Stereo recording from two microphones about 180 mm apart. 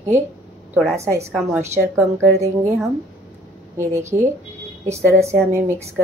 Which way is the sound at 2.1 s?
15° right (ahead or behind).